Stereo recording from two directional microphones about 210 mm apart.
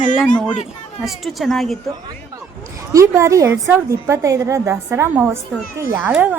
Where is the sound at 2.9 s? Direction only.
15° right (ahead or behind).